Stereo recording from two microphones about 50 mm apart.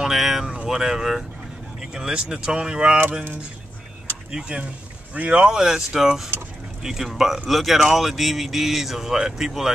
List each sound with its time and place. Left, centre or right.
0.0 s speech: centre
4.3 s speech: centre
5.5 s speech: centre